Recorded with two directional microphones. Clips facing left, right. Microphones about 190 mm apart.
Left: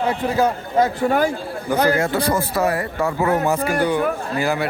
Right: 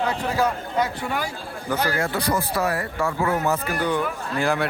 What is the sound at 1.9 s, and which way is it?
A man's voice, 20° left (ahead or behind).